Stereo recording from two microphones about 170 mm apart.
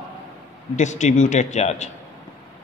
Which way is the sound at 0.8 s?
45° left (ahead or behind).